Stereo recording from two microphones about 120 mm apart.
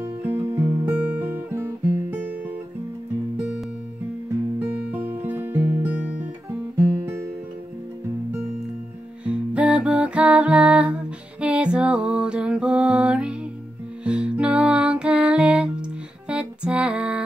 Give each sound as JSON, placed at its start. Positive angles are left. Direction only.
{"t": 0.0, "sound": "music", "side_deg": -15}
{"t": 0.8, "sound": "guitar", "side_deg": -10}
{"t": 4.6, "sound": "music", "side_deg": -10}
{"t": 7.0, "sound": "music", "side_deg": -25}
{"t": 9.2, "sound": "music", "side_deg": -10}